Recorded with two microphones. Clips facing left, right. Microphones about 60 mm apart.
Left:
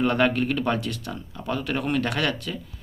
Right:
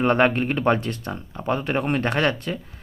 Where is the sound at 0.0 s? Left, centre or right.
Right.